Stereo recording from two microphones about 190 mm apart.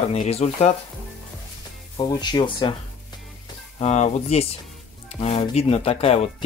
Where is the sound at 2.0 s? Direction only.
25° left (ahead or behind).